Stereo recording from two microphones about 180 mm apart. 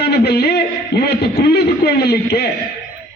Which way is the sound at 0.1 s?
60° left (ahead or behind).